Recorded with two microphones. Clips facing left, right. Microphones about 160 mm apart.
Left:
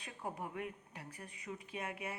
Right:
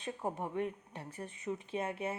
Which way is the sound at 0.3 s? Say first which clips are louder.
Right 6 dB; 25° right (ahead or behind).